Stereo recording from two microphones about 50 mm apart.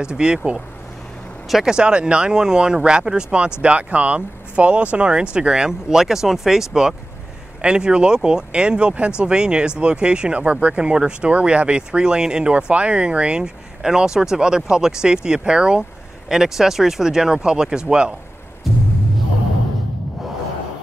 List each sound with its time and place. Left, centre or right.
0.0 s speech: centre